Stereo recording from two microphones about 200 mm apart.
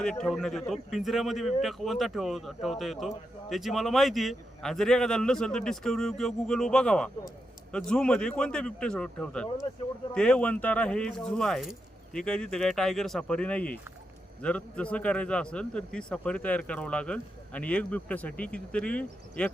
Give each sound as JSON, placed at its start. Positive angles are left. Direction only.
{"t": 0.0, "sound": "a man's voice", "side_deg": 5}